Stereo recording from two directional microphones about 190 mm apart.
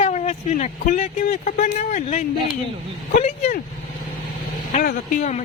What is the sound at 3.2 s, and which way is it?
Vehicle, 35° left (ahead or behind).